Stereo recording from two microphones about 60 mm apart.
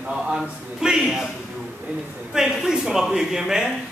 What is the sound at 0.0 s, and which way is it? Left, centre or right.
Speech, centre.